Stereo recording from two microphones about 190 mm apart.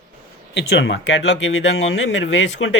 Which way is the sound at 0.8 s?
65° left (ahead or behind).